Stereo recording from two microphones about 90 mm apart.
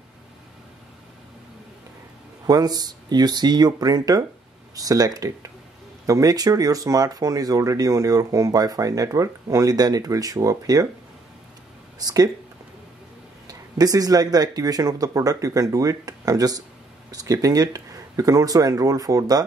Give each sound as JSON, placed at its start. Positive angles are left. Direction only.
{"t": 2.4, "sound": "speech", "side_deg": -45}
{"t": 12.0, "sound": "speech", "side_deg": -45}
{"t": 13.5, "sound": "speech", "side_deg": -45}